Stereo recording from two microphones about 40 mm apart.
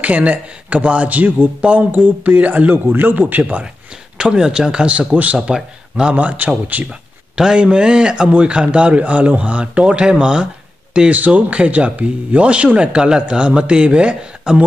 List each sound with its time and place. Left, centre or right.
0.0 s a man's voice: right
1.9 s speech: right
2.7 s speech: right
4.2 s speech: centre
4.8 s a man's voice: right
5.5 s speech: right
6.1 s a man's voice: right
6.9 s a man's voice: centre
11.1 s a man's voice: right